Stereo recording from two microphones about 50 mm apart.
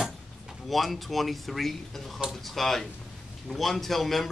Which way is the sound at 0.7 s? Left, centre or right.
Centre.